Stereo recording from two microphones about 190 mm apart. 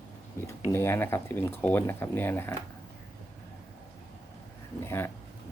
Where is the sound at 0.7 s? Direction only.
10° left (ahead or behind).